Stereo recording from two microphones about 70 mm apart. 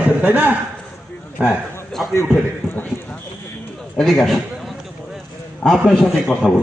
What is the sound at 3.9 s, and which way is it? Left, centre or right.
Speech, centre.